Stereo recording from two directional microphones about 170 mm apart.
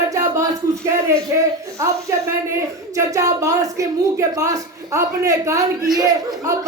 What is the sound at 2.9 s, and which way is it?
A woman's voice, 20° right (ahead or behind).